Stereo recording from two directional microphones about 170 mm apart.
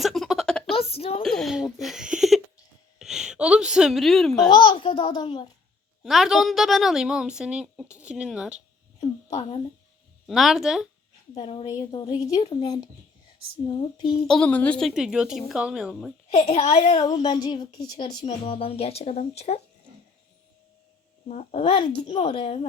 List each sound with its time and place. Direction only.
0.0 s a sound: centre (ahead or behind)
0.7 s a sound: 35° left (ahead or behind)
1.2 s a child's voice: centre (ahead or behind)
4.4 s a woman's voice: 25° left (ahead or behind)
6.0 s a woman's voice: centre (ahead or behind)
10.2 s a woman's voice: centre (ahead or behind)
11.3 s a woman's voice: 30° left (ahead or behind)
14.1 s a woman's voice: 5° left (ahead or behind)
16.3 s speech: 35° left (ahead or behind)
17.0 s a woman's voice: 20° left (ahead or behind); by 19.6 s 40° left (ahead or behind)
21.2 s speech: 40° left (ahead or behind)